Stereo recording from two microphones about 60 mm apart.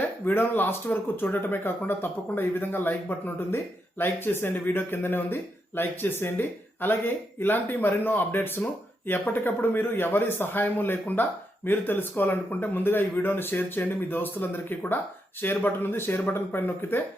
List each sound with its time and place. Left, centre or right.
0.3 s speech: left